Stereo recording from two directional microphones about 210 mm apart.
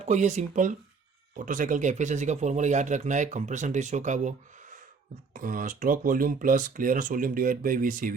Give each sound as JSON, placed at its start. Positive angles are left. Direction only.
{"t": 0.0, "sound": "speech", "side_deg": -35}